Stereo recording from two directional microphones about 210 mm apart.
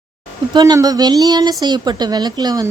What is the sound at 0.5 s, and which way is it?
A woman's voice, 20° right (ahead or behind).